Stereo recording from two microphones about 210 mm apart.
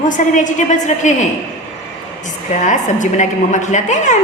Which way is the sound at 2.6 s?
35° left (ahead or behind).